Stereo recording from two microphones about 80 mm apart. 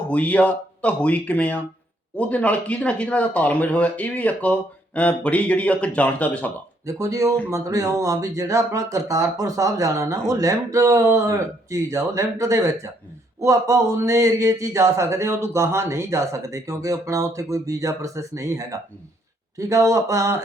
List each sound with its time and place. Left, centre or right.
0.1 s speech: centre
6.8 s speech: right